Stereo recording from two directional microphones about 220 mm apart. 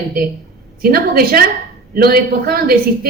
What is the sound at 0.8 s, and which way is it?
A woman's voice, 45° right (ahead or behind).